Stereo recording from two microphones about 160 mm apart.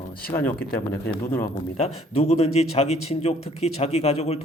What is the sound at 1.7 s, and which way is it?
Speech, 40° left (ahead or behind).